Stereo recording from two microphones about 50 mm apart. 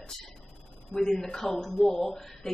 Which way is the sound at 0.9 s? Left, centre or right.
Centre.